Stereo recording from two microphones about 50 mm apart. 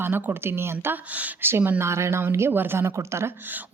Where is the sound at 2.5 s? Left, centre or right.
Right.